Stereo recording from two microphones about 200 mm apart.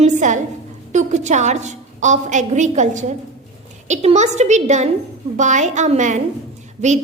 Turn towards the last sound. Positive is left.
turn(degrees=-35)  # may be behind; listen again after turning